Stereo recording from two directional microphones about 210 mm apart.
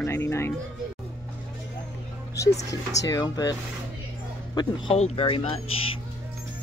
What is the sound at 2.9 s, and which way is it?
Speech, 15° left (ahead or behind).